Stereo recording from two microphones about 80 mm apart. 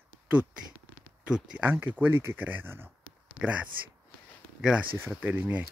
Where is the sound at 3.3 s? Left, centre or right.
Centre.